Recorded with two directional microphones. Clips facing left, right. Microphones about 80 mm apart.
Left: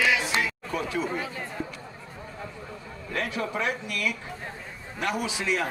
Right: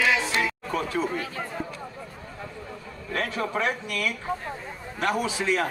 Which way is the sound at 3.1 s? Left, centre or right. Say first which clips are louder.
Right 2 dB; right.